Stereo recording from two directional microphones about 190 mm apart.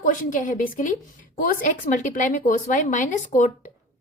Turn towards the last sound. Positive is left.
turn(degrees=45)  # may be behind; listen again after turning